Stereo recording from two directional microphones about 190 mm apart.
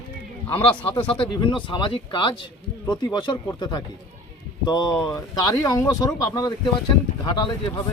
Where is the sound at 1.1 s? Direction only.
25° left (ahead or behind).